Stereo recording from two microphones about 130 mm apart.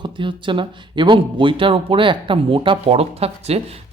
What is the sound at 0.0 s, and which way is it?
Speech, 40° right (ahead or behind).